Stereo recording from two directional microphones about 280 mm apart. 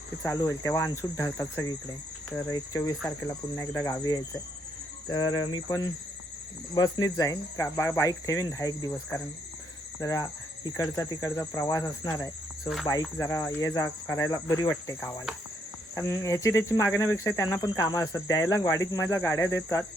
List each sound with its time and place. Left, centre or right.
0.2 s speech: centre
16.0 s speech: centre